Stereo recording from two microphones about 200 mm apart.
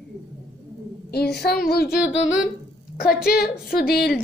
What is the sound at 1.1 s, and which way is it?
Speech, 55° left (ahead or behind).